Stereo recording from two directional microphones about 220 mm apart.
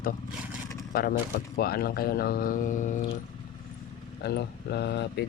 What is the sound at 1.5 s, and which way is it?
Speech, 45° left (ahead or behind).